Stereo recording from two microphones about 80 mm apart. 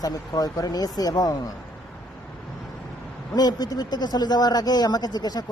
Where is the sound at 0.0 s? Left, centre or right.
Left.